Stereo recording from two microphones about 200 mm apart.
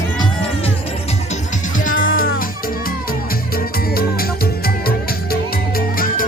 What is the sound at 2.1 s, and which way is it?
Music, 45° left (ahead or behind).